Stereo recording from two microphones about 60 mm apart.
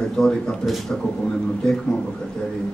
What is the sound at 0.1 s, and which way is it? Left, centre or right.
Speech, centre.